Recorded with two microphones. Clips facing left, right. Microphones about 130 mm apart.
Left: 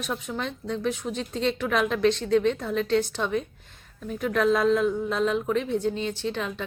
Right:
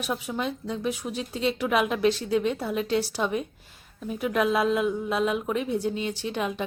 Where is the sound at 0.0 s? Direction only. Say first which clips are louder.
Right 2 dB; 10° right (ahead or behind).